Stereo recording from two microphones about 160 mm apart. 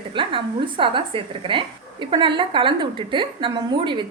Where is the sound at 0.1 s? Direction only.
30° right (ahead or behind).